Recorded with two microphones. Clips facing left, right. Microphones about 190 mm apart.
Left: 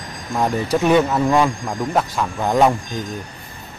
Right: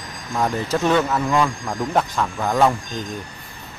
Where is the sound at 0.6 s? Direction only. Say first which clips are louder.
Left 4 dB; 15° left (ahead or behind).